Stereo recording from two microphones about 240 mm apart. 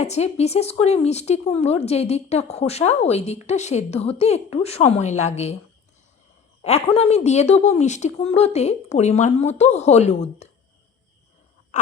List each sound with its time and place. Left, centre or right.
0.0 s speech: left
6.6 s speech: left
11.7 s a sound: left